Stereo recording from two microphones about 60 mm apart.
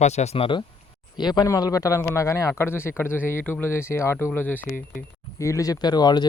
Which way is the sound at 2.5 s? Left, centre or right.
Left.